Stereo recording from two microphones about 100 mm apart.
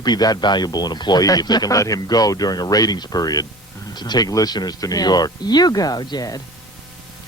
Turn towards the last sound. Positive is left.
turn(degrees=40)  # may be behind; listen again after turning